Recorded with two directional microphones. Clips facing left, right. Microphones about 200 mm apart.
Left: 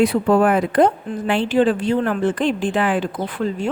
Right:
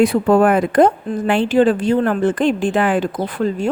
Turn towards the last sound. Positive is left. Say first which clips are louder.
# right 3 dB
turn(degrees=-40)  # may be behind; listen again after turning